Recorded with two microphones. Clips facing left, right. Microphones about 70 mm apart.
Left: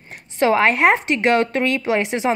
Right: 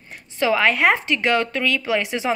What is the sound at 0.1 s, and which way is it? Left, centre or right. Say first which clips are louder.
A woman's voice: left 3 dB; left.